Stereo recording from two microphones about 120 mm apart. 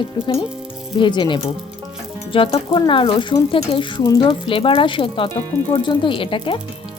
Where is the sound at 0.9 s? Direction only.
40° left (ahead or behind).